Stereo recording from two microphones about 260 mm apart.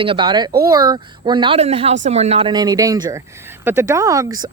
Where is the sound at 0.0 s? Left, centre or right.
Centre.